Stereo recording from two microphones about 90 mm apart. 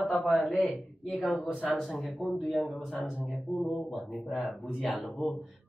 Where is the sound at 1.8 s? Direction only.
Centre (ahead or behind).